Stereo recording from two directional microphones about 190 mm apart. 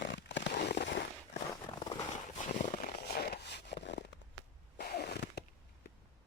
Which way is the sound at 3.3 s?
60° left (ahead or behind).